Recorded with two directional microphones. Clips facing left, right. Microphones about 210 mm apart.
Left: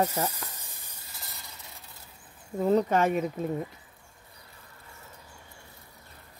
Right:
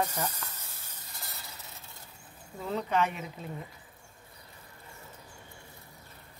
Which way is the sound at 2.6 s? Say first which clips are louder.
Left 7 dB; 45° left (ahead or behind).